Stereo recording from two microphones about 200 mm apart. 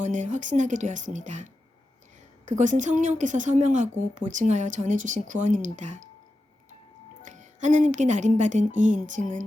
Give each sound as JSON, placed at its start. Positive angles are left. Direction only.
{"t": 0.0, "sound": "a woman's voice", "side_deg": -40}
{"t": 2.5, "sound": "a woman's voice", "side_deg": -40}
{"t": 7.2, "sound": "a woman's voice", "side_deg": -40}